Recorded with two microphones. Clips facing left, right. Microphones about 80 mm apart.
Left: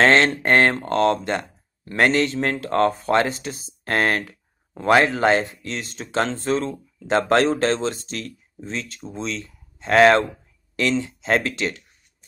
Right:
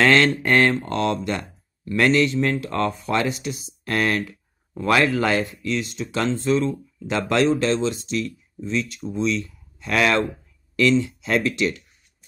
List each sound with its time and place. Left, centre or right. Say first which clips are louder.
0.0 s speech: left 1 dB; left
0.7 s speech: left 3 dB; left